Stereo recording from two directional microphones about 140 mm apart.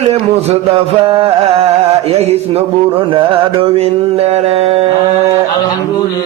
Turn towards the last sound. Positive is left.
turn(degrees=-45)  # may be behind; listen again after turning